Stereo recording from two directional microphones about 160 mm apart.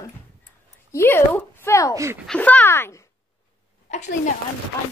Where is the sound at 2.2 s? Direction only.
5° left (ahead or behind).